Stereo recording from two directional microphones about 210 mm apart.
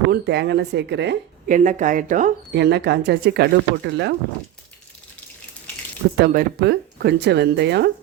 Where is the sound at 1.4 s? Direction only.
35° right (ahead or behind).